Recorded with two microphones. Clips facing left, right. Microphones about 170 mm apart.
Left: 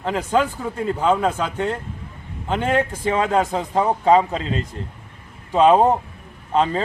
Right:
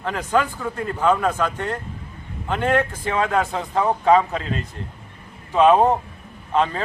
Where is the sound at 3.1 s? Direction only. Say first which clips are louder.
Left 3 dB; 25° left (ahead or behind).